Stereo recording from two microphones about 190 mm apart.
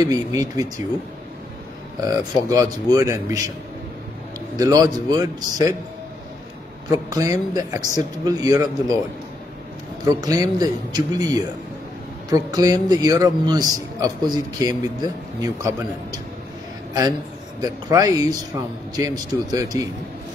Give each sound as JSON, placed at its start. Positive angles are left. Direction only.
{"t": 0.0, "sound": "a man's voice", "side_deg": -20}
{"t": 2.0, "sound": "speech", "side_deg": -20}
{"t": 4.6, "sound": "a man's voice", "side_deg": -20}
{"t": 6.9, "sound": "a man's voice", "side_deg": -20}
{"t": 10.0, "sound": "a man's voice", "side_deg": -20}
{"t": 17.6, "sound": "a man's voice", "side_deg": -20}